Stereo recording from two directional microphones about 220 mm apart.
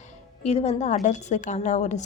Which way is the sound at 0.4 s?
30° left (ahead or behind).